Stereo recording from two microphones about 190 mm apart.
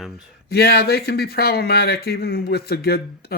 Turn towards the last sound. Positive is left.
turn(degrees=55)  # may be behind; listen again after turning